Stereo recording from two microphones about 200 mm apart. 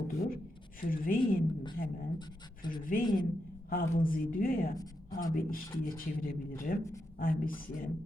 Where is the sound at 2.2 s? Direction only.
20° left (ahead or behind).